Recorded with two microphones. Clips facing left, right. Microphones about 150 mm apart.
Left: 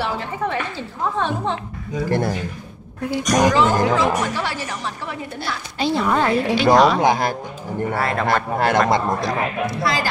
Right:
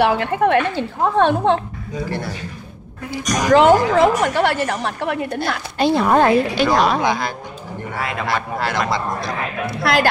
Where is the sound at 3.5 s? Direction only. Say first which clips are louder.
Right 5 dB; 60° right (ahead or behind).